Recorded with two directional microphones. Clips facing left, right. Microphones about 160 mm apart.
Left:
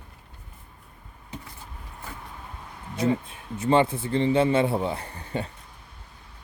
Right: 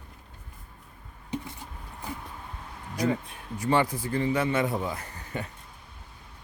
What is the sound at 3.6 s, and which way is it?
A man's voice, 25° left (ahead or behind).